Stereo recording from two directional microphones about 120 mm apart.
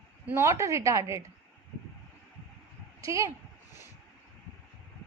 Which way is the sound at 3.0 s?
25° right (ahead or behind).